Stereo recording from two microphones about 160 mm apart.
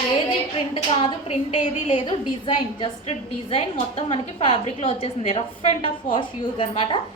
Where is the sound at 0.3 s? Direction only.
30° left (ahead or behind).